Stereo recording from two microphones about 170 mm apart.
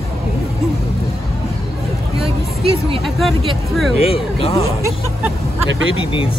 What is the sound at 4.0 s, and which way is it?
Speech, 35° left (ahead or behind).